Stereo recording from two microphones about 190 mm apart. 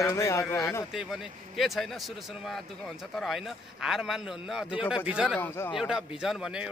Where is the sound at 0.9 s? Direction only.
Centre (ahead or behind).